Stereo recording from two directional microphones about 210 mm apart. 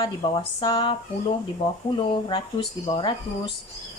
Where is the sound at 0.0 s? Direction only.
20° left (ahead or behind).